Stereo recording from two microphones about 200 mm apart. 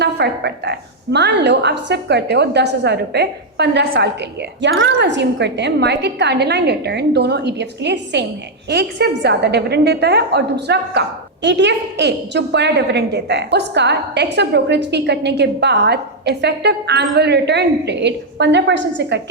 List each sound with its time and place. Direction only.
0.0 s a woman's voice: 55° right (ahead or behind)